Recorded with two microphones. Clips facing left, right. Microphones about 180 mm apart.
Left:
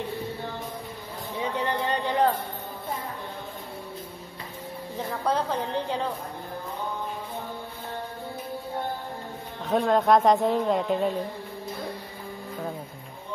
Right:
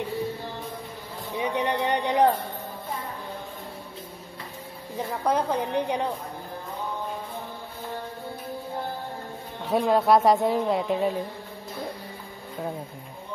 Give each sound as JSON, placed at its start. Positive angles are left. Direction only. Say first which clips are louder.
{"t": 1.4, "sound": "speech", "louder": "right 2 dB", "side_deg": -15}
{"t": 5.2, "sound": "a woman's voice", "louder": "right 2 dB", "side_deg": -10}
{"t": 9.7, "sound": "speech", "louder": "even", "side_deg": -5}